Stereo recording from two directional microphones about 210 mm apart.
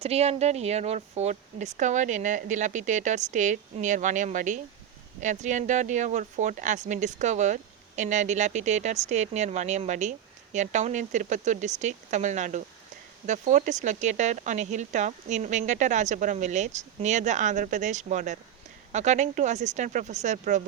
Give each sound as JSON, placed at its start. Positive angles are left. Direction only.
{"t": 0.0, "sound": "speech", "side_deg": -30}